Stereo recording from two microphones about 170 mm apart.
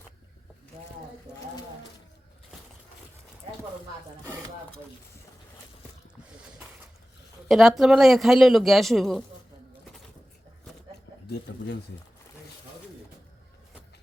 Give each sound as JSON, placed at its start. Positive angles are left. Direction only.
{"t": 7.4, "sound": "speech", "side_deg": 0}
{"t": 11.3, "sound": "speech", "side_deg": 80}